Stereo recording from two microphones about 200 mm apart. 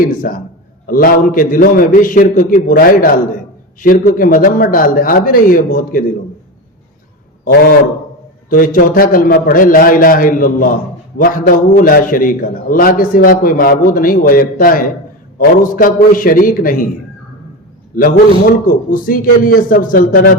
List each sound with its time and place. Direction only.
0.0 s a man's voice: 45° left (ahead or behind)
7.4 s a man's voice: 50° left (ahead or behind)
17.9 s a man's voice: 45° left (ahead or behind)